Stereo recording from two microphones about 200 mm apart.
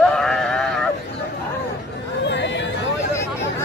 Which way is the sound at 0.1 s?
5° left (ahead or behind).